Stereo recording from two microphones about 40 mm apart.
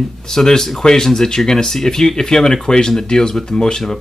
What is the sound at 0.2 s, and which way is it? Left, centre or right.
Speech, centre.